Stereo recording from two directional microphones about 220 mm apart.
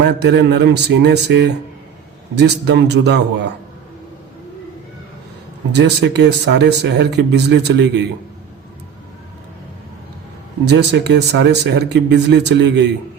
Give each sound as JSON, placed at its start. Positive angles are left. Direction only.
{"t": 0.0, "sound": "speech", "side_deg": -50}
{"t": 5.7, "sound": "speech", "side_deg": -50}
{"t": 10.7, "sound": "speech", "side_deg": -50}